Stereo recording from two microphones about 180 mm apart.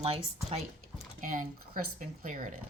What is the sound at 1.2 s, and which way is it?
Speech, 45° right (ahead or behind).